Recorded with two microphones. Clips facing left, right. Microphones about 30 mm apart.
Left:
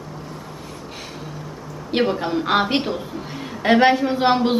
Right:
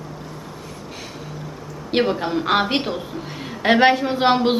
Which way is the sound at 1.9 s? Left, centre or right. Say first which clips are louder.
Even; centre.